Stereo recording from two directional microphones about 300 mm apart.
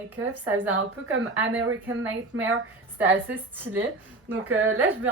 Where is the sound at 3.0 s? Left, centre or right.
Centre.